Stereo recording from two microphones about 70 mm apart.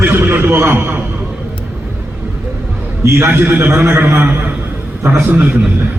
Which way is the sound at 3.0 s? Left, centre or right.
Right.